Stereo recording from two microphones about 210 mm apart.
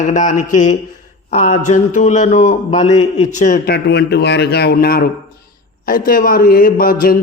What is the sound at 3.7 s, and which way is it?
A man's voice, 55° left (ahead or behind).